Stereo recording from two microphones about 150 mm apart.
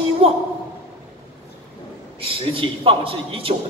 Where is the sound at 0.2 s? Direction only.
40° right (ahead or behind).